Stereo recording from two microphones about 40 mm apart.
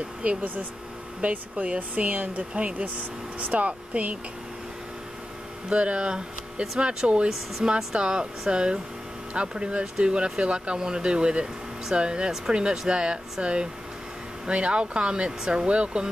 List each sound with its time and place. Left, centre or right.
0.2 s speech: right
5.7 s speech: right